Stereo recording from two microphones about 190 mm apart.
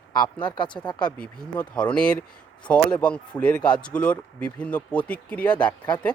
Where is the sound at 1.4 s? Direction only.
5° left (ahead or behind).